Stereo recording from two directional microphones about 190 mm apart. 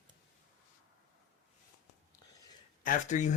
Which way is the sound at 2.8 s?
40° left (ahead or behind).